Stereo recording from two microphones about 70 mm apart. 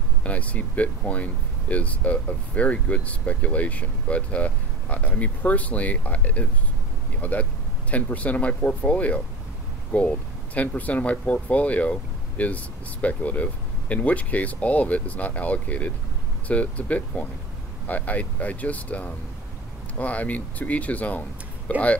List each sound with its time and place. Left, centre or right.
0.2 s speech: left